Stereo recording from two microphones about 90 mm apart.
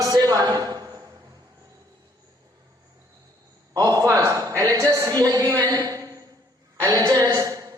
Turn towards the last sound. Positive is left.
turn(degrees=-40)  # may be behind; listen again after turning